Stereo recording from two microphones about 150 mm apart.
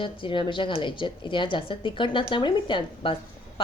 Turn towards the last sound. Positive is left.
turn(degrees=30)  # may be behind; listen again after turning